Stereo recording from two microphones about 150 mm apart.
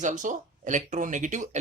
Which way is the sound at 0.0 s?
55° right (ahead or behind).